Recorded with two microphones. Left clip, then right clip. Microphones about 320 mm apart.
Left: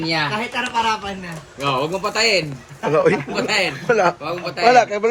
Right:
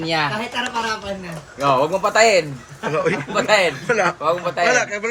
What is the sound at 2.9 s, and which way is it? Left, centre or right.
Speech, centre.